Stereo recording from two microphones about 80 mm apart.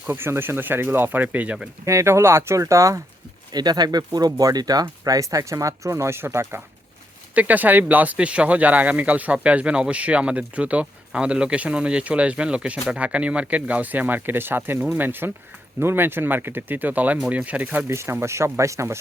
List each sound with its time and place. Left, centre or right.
0.1 s speech: right
1.8 s speech: right
3.5 s speech: right
7.3 s speech: right
17.8 s speech: right